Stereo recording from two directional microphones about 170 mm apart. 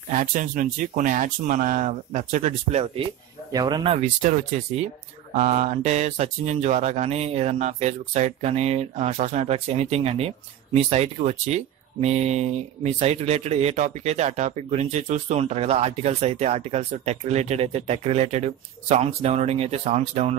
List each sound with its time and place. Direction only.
0.1 s speech: 50° right (ahead or behind)
3.5 s speech: 25° right (ahead or behind)
4.0 s speech: 45° right (ahead or behind)